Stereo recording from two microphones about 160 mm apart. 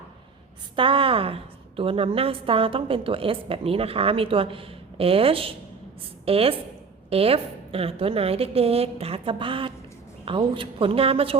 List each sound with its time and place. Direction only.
0.8 s a woman's voice: 35° right (ahead or behind)